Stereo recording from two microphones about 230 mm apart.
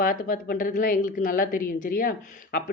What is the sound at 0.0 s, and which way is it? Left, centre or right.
A woman's voice, left.